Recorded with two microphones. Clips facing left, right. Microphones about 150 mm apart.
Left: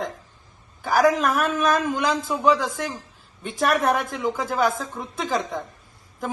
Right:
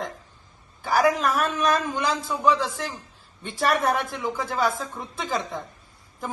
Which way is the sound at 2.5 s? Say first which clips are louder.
Left 2 dB; 45° left (ahead or behind).